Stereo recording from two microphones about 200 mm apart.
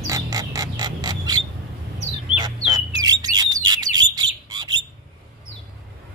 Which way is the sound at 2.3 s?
20° right (ahead or behind).